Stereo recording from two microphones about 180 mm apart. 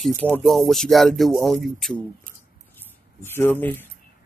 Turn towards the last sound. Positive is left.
turn(degrees=10)  # may be behind; listen again after turning